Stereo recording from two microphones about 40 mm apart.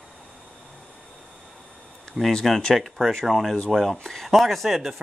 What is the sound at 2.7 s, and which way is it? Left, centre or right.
Speech, centre.